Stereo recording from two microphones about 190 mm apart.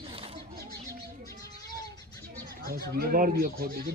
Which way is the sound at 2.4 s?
55° right (ahead or behind).